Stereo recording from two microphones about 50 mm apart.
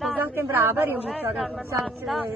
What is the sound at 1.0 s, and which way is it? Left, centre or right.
A man's voice, centre.